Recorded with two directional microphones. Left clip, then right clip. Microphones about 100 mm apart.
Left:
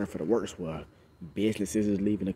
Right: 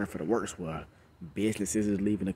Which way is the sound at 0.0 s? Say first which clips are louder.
Left 2 dB; 20° right (ahead or behind).